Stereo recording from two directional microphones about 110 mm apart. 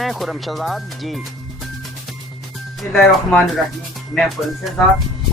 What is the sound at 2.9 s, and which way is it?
Speech, centre (ahead or behind).